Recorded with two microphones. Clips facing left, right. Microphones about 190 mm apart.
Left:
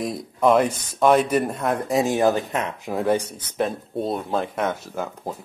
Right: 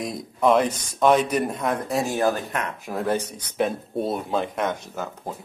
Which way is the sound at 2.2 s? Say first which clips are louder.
Left 3 dB; 20° left (ahead or behind).